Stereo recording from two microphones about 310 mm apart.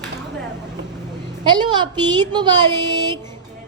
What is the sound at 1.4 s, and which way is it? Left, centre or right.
A woman's voice, centre.